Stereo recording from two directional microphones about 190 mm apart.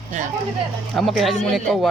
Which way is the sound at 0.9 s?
Centre (ahead or behind).